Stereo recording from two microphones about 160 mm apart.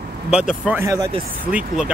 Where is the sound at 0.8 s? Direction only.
20° right (ahead or behind).